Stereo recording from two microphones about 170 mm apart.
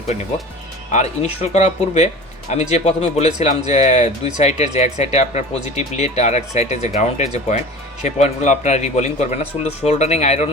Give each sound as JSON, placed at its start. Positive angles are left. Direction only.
{"t": 0.9, "sound": "speech", "side_deg": 40}